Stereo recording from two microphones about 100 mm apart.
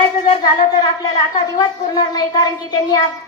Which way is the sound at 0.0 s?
45° left (ahead or behind).